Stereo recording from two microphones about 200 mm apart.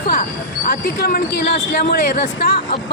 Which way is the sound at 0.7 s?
50° left (ahead or behind).